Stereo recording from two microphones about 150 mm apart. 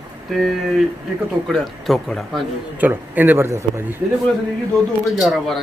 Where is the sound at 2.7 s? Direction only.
10° right (ahead or behind).